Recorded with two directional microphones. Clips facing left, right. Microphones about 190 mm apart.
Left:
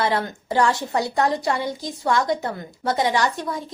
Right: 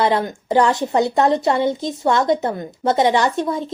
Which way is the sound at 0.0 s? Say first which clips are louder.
Right 5 dB; 20° right (ahead or behind).